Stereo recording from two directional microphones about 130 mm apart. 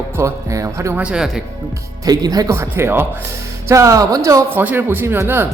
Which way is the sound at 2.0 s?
30° right (ahead or behind).